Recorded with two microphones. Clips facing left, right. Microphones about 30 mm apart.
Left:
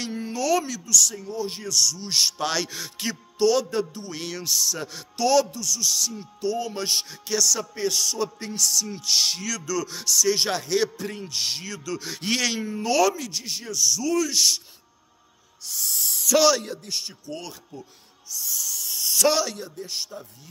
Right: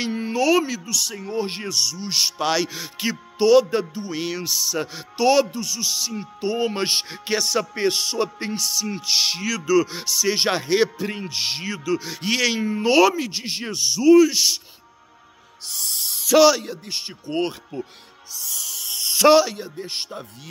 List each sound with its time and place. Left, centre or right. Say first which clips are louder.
0.0 s speech: right 6 dB; right
1.2 s speech: right 4 dB; right
2.0 s speech: right 1 dB; centre
12.0 s speech: right 3 dB; centre
12.7 s speech: right 5 dB; right
15.6 s music: right 1 dB; right
16.0 s music: right 4 dB; right
16.3 s speech: right 5 dB; centre
16.8 s speech: right 1 dB; right
17.1 s speech: right 11 dB; right
18.3 s music: even; right
19.0 s speech: right 7 dB; right
19.7 s speech: right 3 dB; right